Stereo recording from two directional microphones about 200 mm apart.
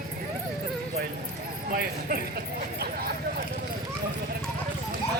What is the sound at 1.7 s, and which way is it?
Clip-clop, 50° right (ahead or behind).